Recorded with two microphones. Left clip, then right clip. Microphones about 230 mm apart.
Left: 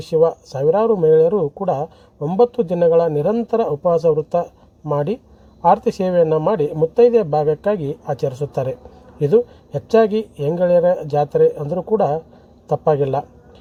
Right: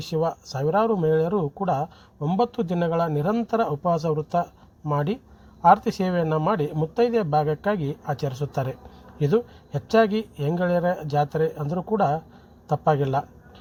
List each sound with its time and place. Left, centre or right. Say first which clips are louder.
0.1 s speech: left 10 dB; right